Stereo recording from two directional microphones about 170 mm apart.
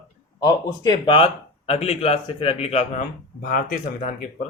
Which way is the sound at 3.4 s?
60° left (ahead or behind).